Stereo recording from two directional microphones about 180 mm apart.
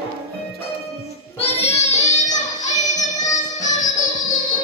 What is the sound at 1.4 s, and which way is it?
Child singing, 35° left (ahead or behind).